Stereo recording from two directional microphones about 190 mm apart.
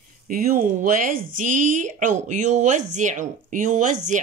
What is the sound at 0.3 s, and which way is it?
Speech, 45° right (ahead or behind).